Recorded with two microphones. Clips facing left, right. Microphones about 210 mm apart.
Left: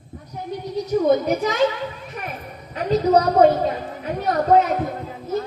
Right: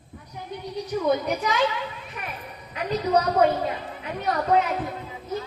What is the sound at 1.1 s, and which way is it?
Speech, 45° left (ahead or behind).